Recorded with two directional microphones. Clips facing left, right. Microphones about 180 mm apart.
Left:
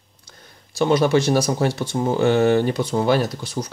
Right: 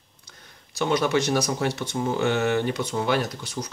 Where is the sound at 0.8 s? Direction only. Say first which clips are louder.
Left 5 dB; 30° left (ahead or behind).